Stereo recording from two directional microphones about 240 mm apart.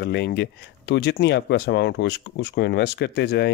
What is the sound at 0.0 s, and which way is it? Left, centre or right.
Speech, left.